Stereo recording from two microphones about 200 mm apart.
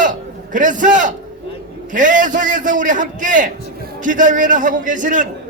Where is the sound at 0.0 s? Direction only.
40° right (ahead or behind).